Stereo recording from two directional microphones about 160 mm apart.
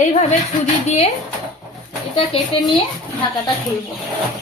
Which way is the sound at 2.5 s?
35° left (ahead or behind).